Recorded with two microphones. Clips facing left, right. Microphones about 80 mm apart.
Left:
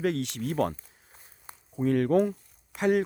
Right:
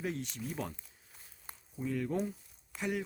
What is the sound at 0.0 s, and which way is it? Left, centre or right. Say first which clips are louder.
Speech: left 10 dB; left.